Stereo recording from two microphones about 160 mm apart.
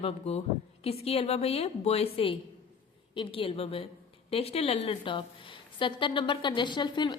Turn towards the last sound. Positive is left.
turn(degrees=30)  # may be behind; listen again after turning